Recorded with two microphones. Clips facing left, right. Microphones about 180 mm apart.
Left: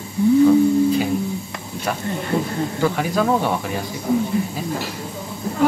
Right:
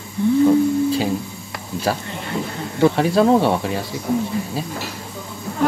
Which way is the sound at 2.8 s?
30° right (ahead or behind).